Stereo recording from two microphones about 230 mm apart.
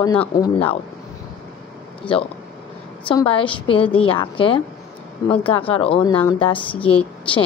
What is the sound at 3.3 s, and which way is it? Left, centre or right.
A woman's voice, left.